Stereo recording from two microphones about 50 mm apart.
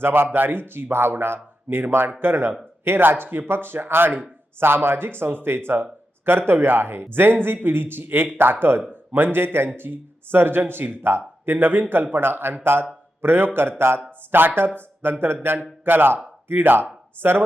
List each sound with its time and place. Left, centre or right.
0.0 s a man's voice: right